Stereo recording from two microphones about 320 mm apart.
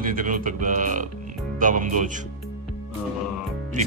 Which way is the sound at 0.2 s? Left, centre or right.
Right.